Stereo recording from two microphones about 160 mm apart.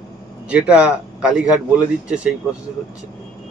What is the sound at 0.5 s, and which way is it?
Speech, 5° right (ahead or behind).